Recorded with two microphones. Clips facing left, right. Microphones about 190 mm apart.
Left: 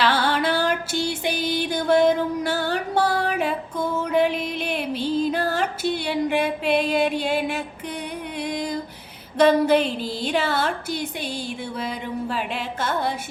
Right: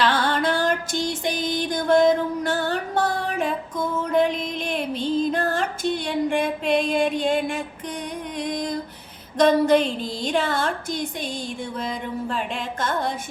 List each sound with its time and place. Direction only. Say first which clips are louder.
0.0 s music: even; 10° left (ahead or behind)
8.4 s female singing: even; 5° left (ahead or behind)
9.4 s a woman's voice: even; 10° left (ahead or behind)